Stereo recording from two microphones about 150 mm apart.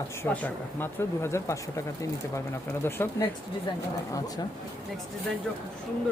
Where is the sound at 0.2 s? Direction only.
15° left (ahead or behind).